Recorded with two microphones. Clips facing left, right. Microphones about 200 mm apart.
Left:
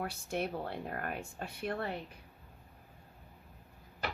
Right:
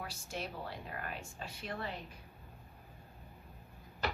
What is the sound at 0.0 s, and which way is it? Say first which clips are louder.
Speech: left 7 dB; 60° left (ahead or behind).